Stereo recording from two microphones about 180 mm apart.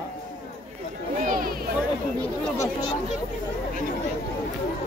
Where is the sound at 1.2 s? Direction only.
50° right (ahead or behind).